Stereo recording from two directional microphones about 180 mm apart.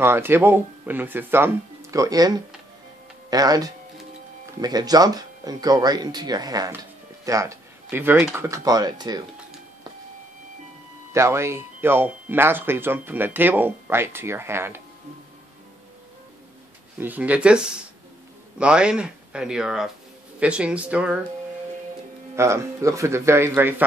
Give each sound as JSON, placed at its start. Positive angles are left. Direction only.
{"t": 0.0, "sound": "speech", "side_deg": -10}
{"t": 11.1, "sound": "speech", "side_deg": -15}
{"t": 17.0, "sound": "speech", "side_deg": -10}
{"t": 22.3, "sound": "speech", "side_deg": -15}